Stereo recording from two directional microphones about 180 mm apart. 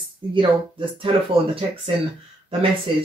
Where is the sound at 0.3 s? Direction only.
30° right (ahead or behind).